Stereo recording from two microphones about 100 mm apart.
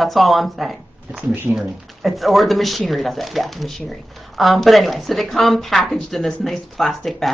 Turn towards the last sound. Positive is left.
turn(degrees=0)  # may be behind; listen again after turning